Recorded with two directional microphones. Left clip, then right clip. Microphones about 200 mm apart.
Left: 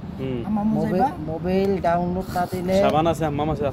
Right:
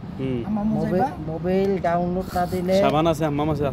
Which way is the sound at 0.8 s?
5° right (ahead or behind).